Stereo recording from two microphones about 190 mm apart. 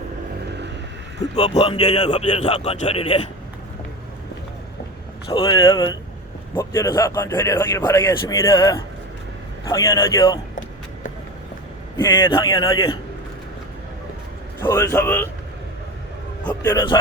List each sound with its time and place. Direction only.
1.4 s a man's voice: 35° left (ahead or behind)
5.3 s a man's voice: 20° left (ahead or behind)
11.9 s a man's voice: 25° left (ahead or behind)
14.6 s speech: 15° left (ahead or behind)
16.5 s speech: 15° left (ahead or behind)